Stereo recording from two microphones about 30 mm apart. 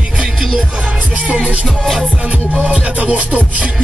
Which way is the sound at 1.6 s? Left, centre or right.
Centre.